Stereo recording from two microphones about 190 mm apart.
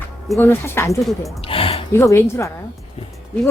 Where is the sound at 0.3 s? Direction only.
10° left (ahead or behind).